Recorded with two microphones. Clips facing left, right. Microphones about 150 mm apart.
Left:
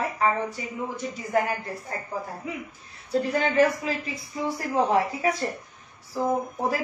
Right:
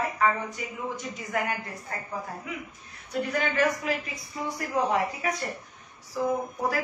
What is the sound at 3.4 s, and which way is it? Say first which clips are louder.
A woman's voice: left 4 dB; 30° left (ahead or behind).